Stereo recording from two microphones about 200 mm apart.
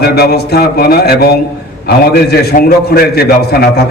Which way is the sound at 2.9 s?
50° left (ahead or behind).